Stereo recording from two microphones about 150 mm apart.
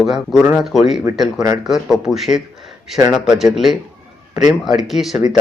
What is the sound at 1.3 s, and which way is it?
Speech, 25° right (ahead or behind).